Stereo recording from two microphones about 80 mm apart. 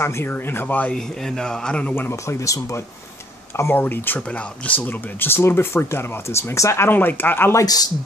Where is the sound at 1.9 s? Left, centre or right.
Left.